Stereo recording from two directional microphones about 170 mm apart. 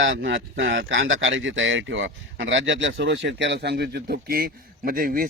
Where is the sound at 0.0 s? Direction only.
90° right.